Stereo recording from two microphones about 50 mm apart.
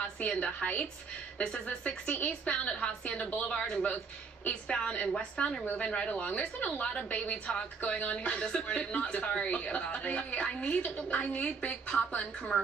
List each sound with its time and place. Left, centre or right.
0.0 s a sound: left
1.4 s a woman's voice: centre
3.4 s a woman's voice: centre
5.1 s a woman's voice: centre